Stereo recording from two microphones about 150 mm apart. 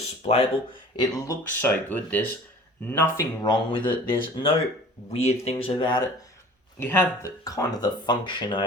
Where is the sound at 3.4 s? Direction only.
30° left (ahead or behind).